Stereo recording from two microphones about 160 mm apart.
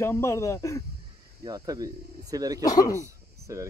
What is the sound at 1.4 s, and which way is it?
Speech, 25° right (ahead or behind).